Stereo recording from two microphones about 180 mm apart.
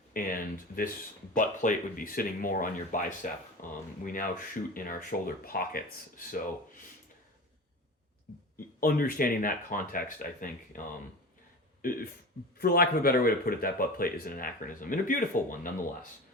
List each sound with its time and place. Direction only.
0.1 s speech: 50° left (ahead or behind)
8.8 s speech: 55° left (ahead or behind)
11.8 s speech: 50° left (ahead or behind)